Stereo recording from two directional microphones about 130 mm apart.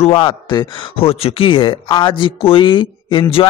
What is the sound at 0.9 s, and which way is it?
Speech, 45° left (ahead or behind).